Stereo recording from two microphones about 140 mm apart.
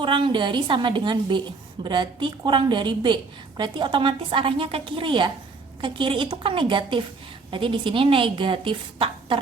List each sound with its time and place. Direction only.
0.0 s a woman's voice: 35° right (ahead or behind)